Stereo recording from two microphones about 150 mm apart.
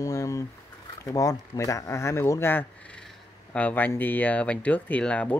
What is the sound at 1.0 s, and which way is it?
Speech, 20° left (ahead or behind).